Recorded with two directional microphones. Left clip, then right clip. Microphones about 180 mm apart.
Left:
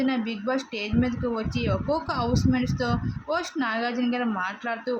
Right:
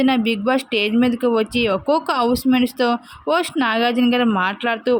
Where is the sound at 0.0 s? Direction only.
50° right (ahead or behind).